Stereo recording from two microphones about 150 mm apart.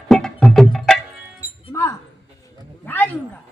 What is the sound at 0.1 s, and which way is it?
Music, 5° left (ahead or behind).